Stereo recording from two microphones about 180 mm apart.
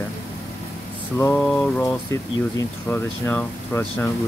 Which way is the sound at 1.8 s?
20° left (ahead or behind).